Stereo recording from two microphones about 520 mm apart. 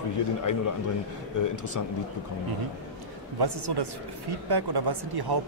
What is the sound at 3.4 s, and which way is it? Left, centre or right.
Speech, right.